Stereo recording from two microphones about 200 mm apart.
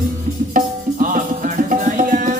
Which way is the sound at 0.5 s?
40° right (ahead or behind).